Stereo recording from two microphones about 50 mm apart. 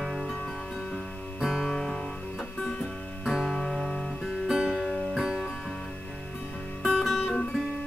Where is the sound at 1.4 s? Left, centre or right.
Centre.